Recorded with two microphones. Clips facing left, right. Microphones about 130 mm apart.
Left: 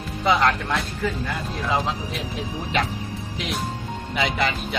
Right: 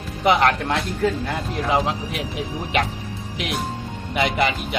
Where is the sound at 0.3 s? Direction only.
20° right (ahead or behind).